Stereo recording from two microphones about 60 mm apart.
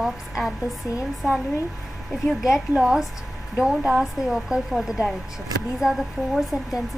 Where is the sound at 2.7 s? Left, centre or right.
Centre.